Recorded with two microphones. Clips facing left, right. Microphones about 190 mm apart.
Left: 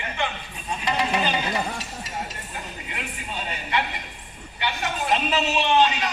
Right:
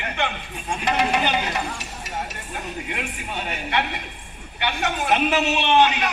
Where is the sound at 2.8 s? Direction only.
60° right (ahead or behind).